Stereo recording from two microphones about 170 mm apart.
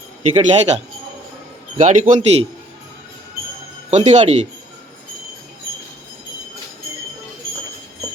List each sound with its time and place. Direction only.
0.2 s a man's voice: 40° right (ahead or behind)
1.8 s a man's voice: 50° right (ahead or behind)
3.8 s a man's voice: 40° right (ahead or behind)